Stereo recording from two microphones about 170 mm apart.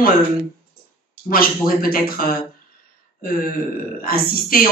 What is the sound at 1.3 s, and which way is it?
Speech, 60° left (ahead or behind).